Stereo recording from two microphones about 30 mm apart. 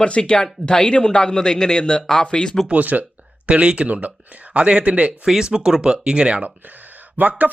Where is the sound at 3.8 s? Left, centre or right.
Right.